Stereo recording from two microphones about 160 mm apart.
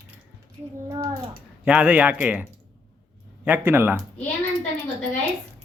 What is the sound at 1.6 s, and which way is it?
Speech, 10° right (ahead or behind).